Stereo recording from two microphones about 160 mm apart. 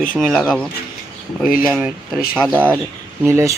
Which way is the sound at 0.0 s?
5° left (ahead or behind).